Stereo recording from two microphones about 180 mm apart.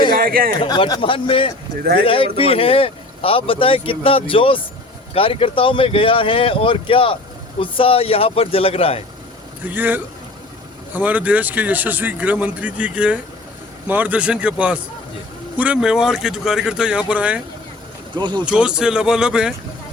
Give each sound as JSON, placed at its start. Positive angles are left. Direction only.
{"t": 0.1, "sound": "a sound", "side_deg": -55}
{"t": 0.6, "sound": "speech", "side_deg": 25}
{"t": 9.6, "sound": "speech", "side_deg": -10}
{"t": 18.2, "sound": "speech", "side_deg": -25}
{"t": 18.4, "sound": "speech", "side_deg": -5}